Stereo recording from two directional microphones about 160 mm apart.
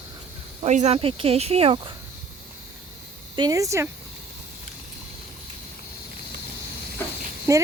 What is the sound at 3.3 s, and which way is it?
Speech, 25° right (ahead or behind).